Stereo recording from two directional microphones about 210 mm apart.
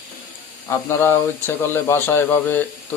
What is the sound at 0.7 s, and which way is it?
Speech, 10° left (ahead or behind).